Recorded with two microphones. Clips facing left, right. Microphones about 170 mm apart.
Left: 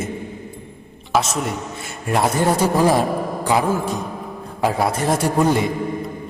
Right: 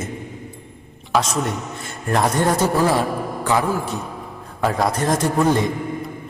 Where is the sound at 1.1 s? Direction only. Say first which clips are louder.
Even; 5° left (ahead or behind).